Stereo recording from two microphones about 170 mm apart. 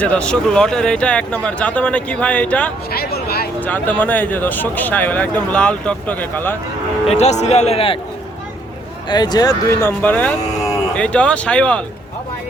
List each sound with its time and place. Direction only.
0.0 s speech: 5° left (ahead or behind)
2.9 s a sound: 65° left (ahead or behind)
3.6 s speech: 10° left (ahead or behind)
7.1 s speech: 40° left (ahead or behind)
9.0 s speech: 25° left (ahead or behind)
10.0 s speech: 10° left (ahead or behind)